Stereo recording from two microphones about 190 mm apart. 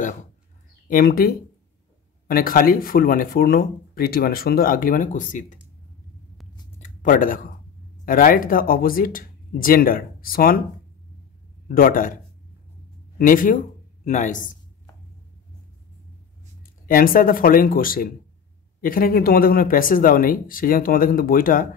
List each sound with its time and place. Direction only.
0.8 s speech: 50° left (ahead or behind)
7.0 s speech: 45° left (ahead or behind)
11.7 s speech: 45° left (ahead or behind)
13.2 s speech: 45° left (ahead or behind)
16.6 s speech: 50° left (ahead or behind)